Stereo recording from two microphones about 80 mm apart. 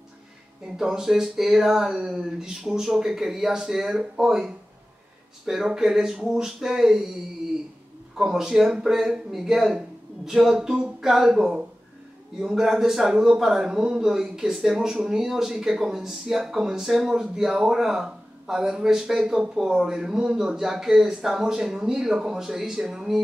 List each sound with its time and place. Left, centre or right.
0.7 s speech: centre
5.5 s speech: centre
8.2 s a man's voice: centre